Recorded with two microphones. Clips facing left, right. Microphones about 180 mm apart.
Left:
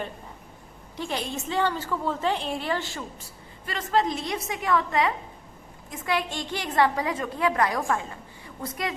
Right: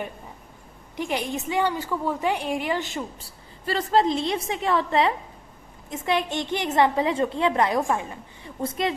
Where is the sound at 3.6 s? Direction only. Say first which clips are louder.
Right 4 dB; 30° right (ahead or behind).